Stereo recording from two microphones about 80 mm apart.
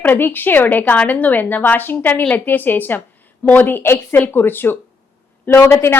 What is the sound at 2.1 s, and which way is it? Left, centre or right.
Speech, centre.